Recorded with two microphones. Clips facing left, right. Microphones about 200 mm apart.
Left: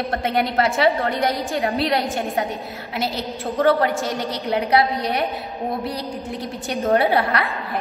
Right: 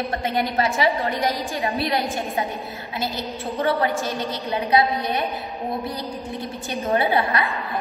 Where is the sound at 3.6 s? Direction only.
55° left (ahead or behind).